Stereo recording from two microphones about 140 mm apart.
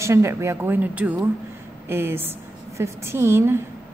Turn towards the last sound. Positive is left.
turn(degrees=-20)  # may be behind; listen again after turning